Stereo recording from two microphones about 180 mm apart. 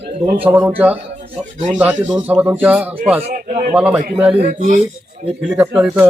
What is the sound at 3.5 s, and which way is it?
Speech, 45° right (ahead or behind).